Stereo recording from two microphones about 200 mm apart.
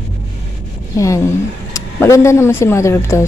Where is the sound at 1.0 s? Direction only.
15° left (ahead or behind).